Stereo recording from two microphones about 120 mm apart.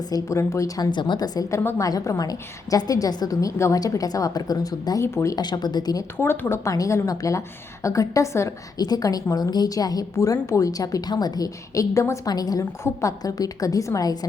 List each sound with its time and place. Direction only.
0.1 s a woman's voice: 25° left (ahead or behind)
0.9 s a woman's voice: 40° left (ahead or behind)
6.1 s a woman's voice: 15° left (ahead or behind); by 14.3 s 30° left (ahead or behind)